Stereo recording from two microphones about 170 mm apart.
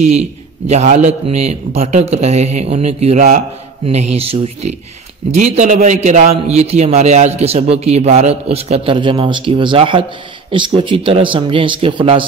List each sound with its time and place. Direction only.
0.7 s a man's voice: 40° right (ahead or behind)